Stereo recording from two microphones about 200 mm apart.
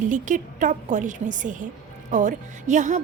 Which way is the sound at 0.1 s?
40° right (ahead or behind).